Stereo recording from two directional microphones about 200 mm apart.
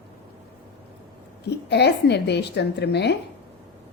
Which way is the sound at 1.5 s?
55° left (ahead or behind).